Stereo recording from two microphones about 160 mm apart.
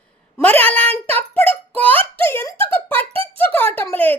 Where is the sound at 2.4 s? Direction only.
35° right (ahead or behind).